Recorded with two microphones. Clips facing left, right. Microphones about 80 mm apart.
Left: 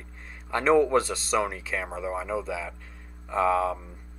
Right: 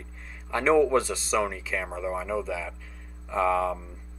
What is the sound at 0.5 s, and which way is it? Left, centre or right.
Speech, centre.